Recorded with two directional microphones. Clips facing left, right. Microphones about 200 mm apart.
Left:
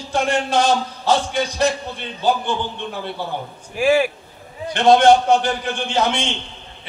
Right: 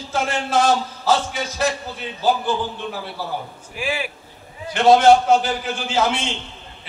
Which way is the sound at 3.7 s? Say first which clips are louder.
Left 10 dB; 45° left (ahead or behind).